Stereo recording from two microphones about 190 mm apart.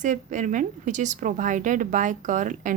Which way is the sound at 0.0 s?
40° right (ahead or behind).